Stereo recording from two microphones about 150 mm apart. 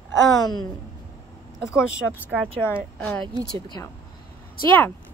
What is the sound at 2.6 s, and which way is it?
Speech, 15° left (ahead or behind).